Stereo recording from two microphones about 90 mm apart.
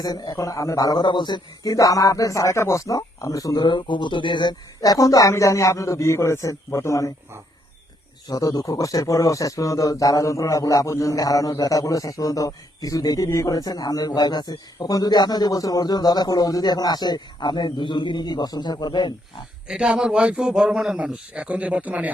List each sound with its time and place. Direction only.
0.0 s speech: 40° left (ahead or behind)
1.7 s speech: 40° left (ahead or behind)
3.7 s speech: 60° left (ahead or behind); by 7.1 s 35° left (ahead or behind)
8.3 s speech: 40° left (ahead or behind)
19.6 s a man's voice: 5° right (ahead or behind)